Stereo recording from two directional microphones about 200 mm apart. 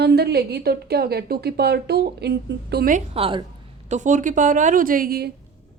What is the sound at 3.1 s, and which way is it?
Speech, 25° right (ahead or behind).